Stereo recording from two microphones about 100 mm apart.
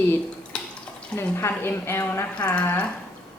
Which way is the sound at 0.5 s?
10° left (ahead or behind).